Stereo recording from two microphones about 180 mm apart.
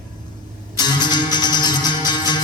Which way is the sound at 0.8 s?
25° left (ahead or behind).